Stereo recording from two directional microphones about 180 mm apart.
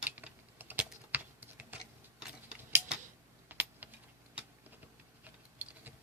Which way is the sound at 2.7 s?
5° right (ahead or behind).